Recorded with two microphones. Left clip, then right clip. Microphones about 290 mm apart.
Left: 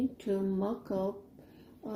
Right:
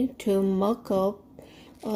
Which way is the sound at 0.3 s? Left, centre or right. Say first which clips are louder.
Right 10 dB; right.